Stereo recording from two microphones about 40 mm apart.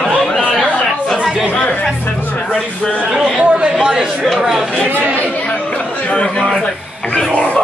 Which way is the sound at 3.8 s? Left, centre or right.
Centre.